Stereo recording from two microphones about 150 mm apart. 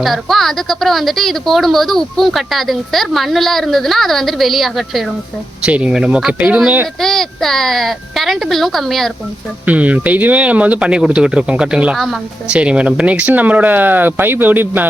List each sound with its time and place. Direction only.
0.0 s a woman's voice: centre (ahead or behind)
7.0 s a woman's voice: centre (ahead or behind)
9.6 s speech: 10° right (ahead or behind)